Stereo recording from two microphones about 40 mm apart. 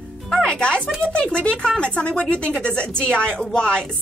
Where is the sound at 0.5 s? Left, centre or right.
Left.